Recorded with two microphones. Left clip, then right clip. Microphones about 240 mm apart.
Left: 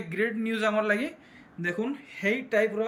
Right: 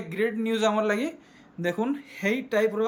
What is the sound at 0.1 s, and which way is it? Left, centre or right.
Speech, centre.